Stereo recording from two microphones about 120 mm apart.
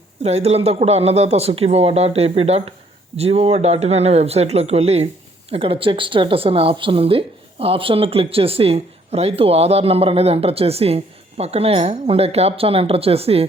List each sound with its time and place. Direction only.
0.2 s speech: 60° right (ahead or behind)